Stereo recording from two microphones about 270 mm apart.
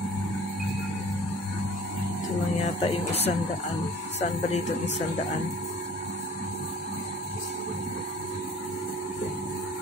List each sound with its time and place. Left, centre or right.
2.6 s speech: left